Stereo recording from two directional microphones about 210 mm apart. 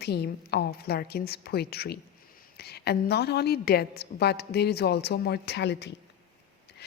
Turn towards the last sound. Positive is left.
turn(degrees=55)  # may be behind; listen again after turning